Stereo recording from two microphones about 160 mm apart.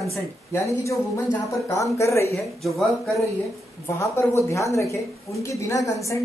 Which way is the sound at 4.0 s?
20° left (ahead or behind).